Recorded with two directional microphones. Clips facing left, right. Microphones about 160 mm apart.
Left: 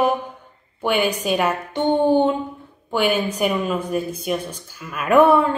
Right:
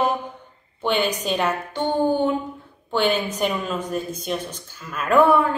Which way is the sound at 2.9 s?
10° left (ahead or behind).